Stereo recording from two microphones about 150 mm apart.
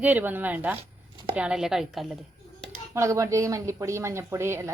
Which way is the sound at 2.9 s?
20° right (ahead or behind).